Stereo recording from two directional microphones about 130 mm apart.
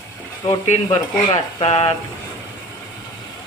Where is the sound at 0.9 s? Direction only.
35° left (ahead or behind).